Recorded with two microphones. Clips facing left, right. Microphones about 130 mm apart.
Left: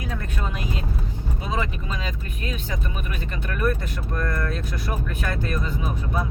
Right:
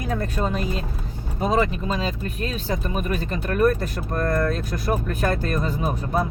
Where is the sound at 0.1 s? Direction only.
40° right (ahead or behind).